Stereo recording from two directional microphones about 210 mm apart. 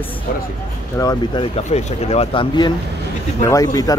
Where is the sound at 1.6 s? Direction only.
35° left (ahead or behind).